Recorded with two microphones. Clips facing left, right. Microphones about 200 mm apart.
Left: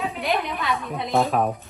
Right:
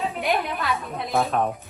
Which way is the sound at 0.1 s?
Centre (ahead or behind).